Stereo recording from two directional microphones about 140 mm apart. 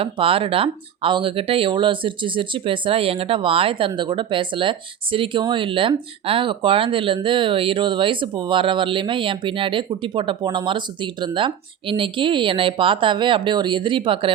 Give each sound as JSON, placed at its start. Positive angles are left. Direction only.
{"t": 0.0, "sound": "speech", "side_deg": -40}